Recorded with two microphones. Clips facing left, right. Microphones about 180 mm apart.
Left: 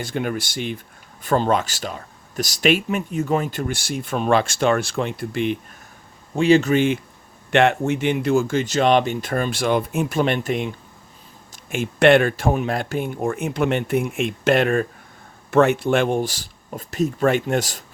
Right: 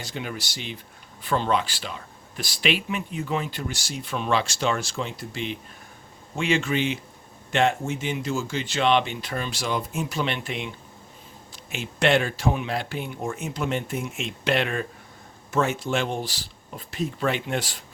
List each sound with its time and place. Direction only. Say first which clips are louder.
0.0 s speech: left 8 dB; 55° left (ahead or behind)
6.3 s speech: left 9 dB; 35° left (ahead or behind)
7.5 s speech: left 6 dB; 65° left (ahead or behind); by 14.8 s 50° left (ahead or behind)
15.4 s speech: left 8 dB; 65° left (ahead or behind); by 17.8 s 45° left (ahead or behind)